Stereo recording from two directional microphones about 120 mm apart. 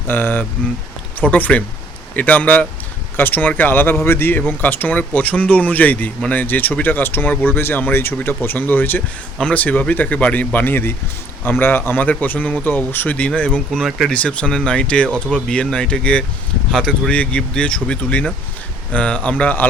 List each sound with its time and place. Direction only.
0.1 s speech: 15° left (ahead or behind)